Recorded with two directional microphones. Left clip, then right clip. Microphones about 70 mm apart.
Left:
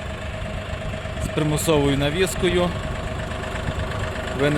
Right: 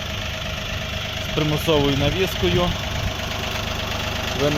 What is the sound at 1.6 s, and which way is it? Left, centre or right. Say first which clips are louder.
Speech: even; left.